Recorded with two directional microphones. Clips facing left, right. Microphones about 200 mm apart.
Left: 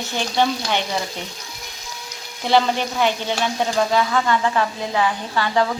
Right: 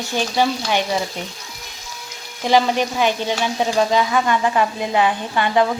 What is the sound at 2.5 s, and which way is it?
Speech, 15° right (ahead or behind).